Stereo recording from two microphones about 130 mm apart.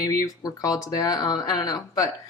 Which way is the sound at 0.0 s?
25° left (ahead or behind).